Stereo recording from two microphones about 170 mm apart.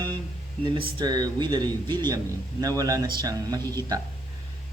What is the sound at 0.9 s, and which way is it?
Speech, 25° right (ahead or behind).